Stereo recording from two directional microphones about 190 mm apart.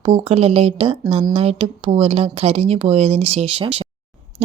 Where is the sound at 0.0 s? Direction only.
30° right (ahead or behind).